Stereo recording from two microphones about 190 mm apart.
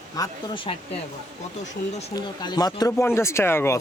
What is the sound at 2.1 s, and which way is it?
Speech, 20° left (ahead or behind).